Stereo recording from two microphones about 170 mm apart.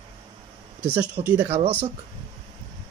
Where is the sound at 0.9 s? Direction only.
10° right (ahead or behind).